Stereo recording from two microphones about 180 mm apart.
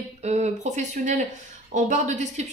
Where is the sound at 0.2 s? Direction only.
40° right (ahead or behind).